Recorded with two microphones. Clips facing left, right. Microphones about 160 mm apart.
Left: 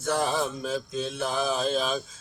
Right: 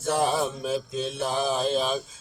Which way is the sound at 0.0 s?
25° right (ahead or behind).